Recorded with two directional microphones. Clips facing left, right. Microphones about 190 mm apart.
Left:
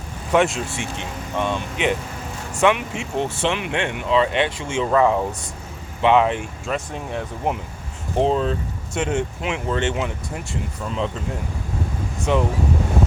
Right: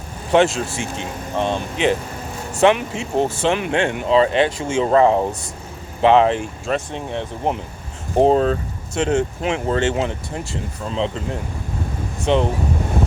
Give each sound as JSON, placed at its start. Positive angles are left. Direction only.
{"t": 0.3, "sound": "speech", "side_deg": -35}
{"t": 8.2, "sound": "speech", "side_deg": -45}
{"t": 12.2, "sound": "speech", "side_deg": -30}